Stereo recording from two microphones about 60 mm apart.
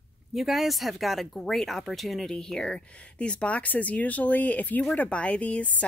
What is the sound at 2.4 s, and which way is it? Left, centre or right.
Speech, centre.